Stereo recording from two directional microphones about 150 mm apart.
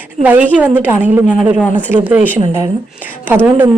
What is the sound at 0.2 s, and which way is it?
A woman's voice, 10° right (ahead or behind).